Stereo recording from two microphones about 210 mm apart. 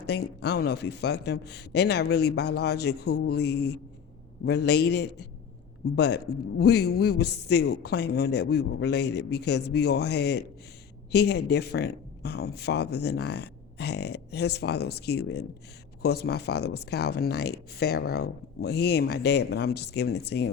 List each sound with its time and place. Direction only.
0.0 s a woman's voice: 50° left (ahead or behind)